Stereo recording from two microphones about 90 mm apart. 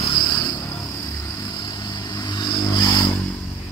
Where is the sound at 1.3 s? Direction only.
50° left (ahead or behind).